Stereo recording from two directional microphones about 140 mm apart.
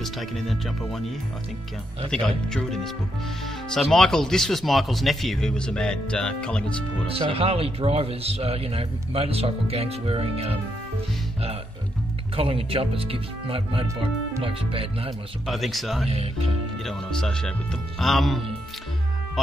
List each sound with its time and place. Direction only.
0.0 s speech: centre (ahead or behind)
7.1 s a man's voice: 45° right (ahead or behind)
12.4 s speech: 40° right (ahead or behind)
15.4 s speech: centre (ahead or behind)
16.1 s a man's voice: 45° right (ahead or behind)
16.8 s speech: 5° left (ahead or behind)